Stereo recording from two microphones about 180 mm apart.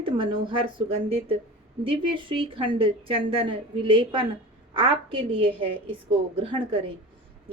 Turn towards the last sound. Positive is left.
turn(degrees=-30)  # may be behind; listen again after turning